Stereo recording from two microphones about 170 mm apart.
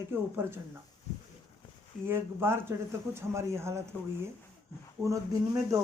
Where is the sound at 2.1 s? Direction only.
15° right (ahead or behind).